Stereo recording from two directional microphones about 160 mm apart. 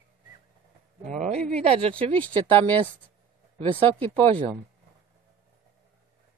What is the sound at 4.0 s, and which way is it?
Speech, 10° left (ahead or behind).